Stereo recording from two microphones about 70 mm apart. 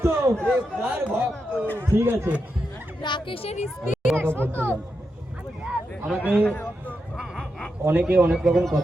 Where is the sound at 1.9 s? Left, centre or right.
Right.